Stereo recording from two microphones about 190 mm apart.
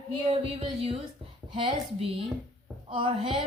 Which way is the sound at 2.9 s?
25° right (ahead or behind).